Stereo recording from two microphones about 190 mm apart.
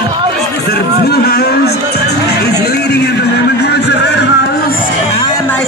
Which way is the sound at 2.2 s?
60° left (ahead or behind).